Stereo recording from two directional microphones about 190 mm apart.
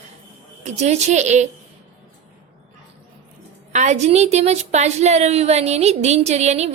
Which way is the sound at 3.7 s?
40° right (ahead or behind).